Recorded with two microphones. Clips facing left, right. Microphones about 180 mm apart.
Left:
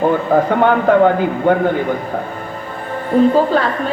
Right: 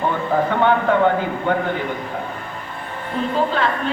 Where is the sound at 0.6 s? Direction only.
40° left (ahead or behind).